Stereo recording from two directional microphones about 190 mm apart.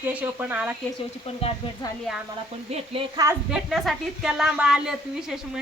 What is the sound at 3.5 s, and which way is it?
Speech, centre (ahead or behind).